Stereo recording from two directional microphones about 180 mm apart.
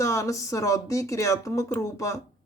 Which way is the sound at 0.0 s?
15° left (ahead or behind).